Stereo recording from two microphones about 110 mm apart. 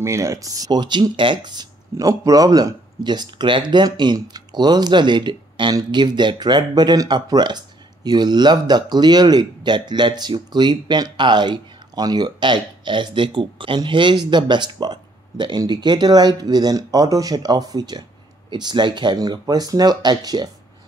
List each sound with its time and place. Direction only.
0.0 s speech: 25° right (ahead or behind)